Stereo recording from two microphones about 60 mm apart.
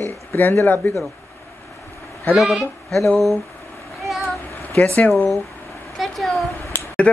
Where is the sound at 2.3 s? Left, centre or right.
Centre.